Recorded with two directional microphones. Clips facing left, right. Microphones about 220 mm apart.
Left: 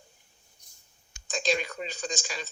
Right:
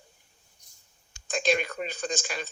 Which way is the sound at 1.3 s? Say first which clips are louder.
Right 3 dB; 55° right (ahead or behind).